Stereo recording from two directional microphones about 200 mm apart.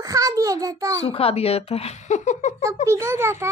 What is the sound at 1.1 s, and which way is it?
Speech, 30° left (ahead or behind).